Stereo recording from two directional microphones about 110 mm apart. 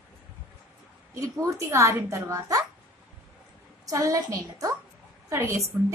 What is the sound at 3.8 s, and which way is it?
A woman's voice, 30° right (ahead or behind).